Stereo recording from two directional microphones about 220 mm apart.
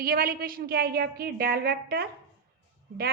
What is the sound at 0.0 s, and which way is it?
A woman's voice, 40° right (ahead or behind).